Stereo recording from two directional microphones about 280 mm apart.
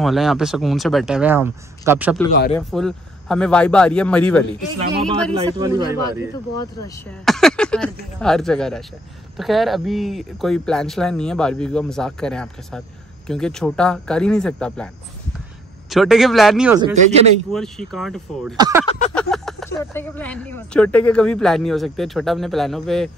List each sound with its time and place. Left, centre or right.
0.0 s speech: centre
5.3 s speech: centre
6.6 s speech: centre
15.9 s speech: centre
16.8 s speech: right
17.5 s speech: centre
18.6 s speech: centre
18.9 s a sound: left
19.1 s speech: centre